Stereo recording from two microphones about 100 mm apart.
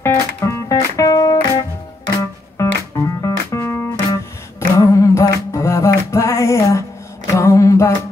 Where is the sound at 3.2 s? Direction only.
30° left (ahead or behind).